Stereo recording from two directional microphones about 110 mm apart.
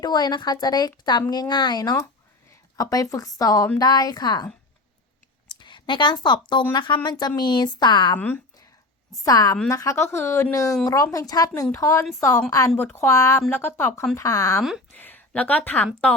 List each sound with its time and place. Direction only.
0.0 s a woman's voice: 40° left (ahead or behind)
5.5 s a woman's voice: 45° left (ahead or behind)
9.2 s a woman's voice: 35° left (ahead or behind)
14.9 s speech: 15° left (ahead or behind)